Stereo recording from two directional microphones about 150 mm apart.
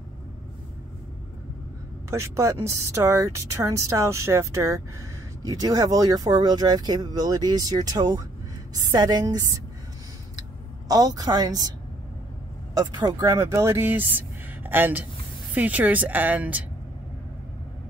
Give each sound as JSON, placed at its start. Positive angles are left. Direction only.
{"t": 2.0, "sound": "speech", "side_deg": -20}
{"t": 10.9, "sound": "speech", "side_deg": -25}
{"t": 12.7, "sound": "speech", "side_deg": -25}